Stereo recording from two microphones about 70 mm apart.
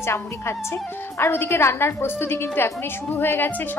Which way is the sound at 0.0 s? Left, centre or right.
Left.